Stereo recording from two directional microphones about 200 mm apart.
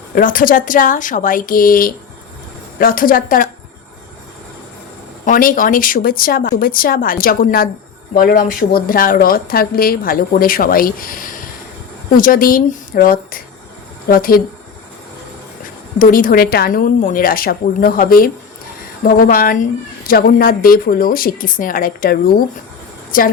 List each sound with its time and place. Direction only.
0.2 s a woman's voice: 45° left (ahead or behind)
5.2 s a woman's voice: 45° left (ahead or behind)
16.0 s a woman's voice: 45° left (ahead or behind)